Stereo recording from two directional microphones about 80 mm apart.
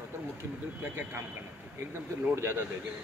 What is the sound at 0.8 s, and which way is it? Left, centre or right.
Speech, right.